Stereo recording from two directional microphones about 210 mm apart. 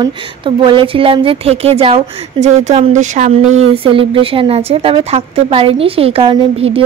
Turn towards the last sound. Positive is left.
turn(degrees=-25)  # may be behind; listen again after turning